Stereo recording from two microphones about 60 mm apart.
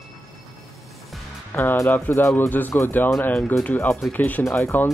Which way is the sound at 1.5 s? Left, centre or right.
Left.